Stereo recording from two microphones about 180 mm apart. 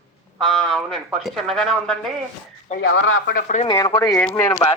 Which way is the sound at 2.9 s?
90° left.